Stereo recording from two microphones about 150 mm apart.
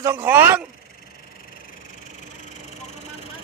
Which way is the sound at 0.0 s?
15° right (ahead or behind).